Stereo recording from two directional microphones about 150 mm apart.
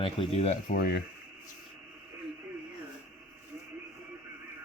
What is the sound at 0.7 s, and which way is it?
Speech, 90° left.